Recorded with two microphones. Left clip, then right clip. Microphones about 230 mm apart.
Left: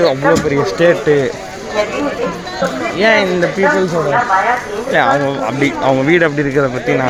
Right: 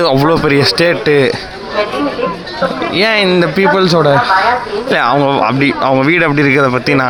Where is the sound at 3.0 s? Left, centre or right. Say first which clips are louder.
Left 1 dB; centre.